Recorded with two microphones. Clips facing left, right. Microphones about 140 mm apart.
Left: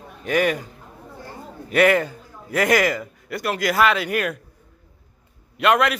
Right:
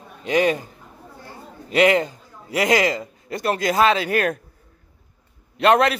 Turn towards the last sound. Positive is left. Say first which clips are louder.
# right 2 dB
turn(degrees=-30)  # may be behind; listen again after turning